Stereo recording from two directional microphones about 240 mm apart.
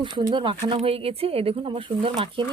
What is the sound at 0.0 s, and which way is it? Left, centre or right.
Speech, right.